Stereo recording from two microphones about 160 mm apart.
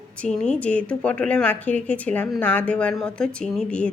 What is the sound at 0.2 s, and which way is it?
A woman's voice, 5° left (ahead or behind).